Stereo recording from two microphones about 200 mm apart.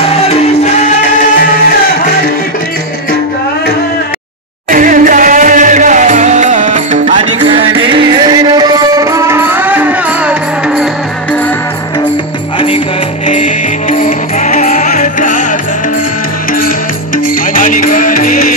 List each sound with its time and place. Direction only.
4.6 s music: 45° right (ahead or behind)
7.2 s music: 25° right (ahead or behind); by 10.9 s 5° right (ahead or behind)
12.5 s music: 25° left (ahead or behind)
13.3 s music: 40° left (ahead or behind)
17.6 s music: 40° left (ahead or behind)